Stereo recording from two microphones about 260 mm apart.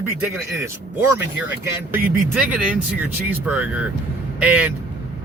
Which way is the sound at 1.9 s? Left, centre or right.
Centre.